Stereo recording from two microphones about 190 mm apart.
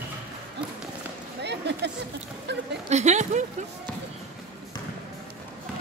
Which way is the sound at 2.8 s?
35° right (ahead or behind).